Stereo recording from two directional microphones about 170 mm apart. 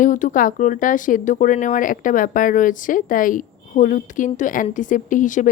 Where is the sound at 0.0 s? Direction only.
50° left (ahead or behind).